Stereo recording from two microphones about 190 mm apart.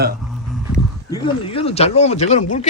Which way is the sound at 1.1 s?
30° left (ahead or behind).